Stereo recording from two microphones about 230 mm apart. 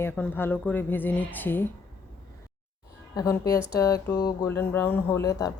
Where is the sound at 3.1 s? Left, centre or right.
Centre.